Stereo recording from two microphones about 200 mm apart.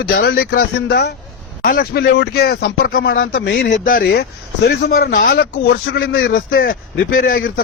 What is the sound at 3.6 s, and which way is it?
Speech, 40° left (ahead or behind).